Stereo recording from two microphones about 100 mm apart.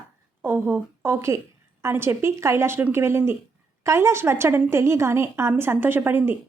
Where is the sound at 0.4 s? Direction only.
20° right (ahead or behind).